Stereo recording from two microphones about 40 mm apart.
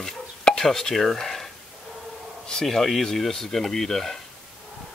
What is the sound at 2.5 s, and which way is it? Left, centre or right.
Speech, centre.